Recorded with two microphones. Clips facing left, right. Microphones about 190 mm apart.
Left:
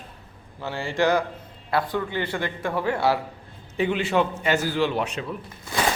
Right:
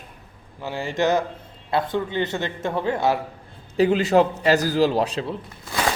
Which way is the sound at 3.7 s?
35° right (ahead or behind).